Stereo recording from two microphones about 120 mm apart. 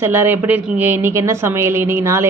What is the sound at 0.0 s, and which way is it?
A woman's voice, 20° right (ahead or behind).